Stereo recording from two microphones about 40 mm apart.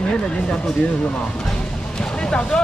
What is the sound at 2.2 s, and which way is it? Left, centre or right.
Speech, left.